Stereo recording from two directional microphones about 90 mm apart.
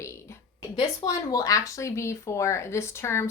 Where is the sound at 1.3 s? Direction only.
40° left (ahead or behind).